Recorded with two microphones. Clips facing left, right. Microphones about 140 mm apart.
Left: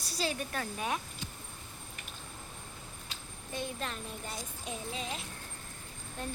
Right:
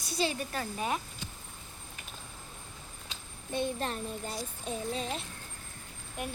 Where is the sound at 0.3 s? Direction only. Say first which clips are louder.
Right 2 dB; centre (ahead or behind).